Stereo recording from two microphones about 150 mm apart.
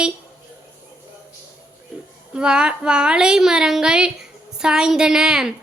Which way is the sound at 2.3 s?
5° right (ahead or behind).